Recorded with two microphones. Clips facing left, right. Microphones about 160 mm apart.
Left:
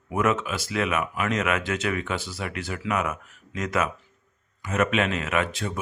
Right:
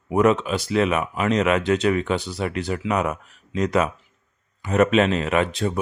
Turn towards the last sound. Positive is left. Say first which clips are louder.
# right 5 dB
turn(degrees=-35)  # may be behind; listen again after turning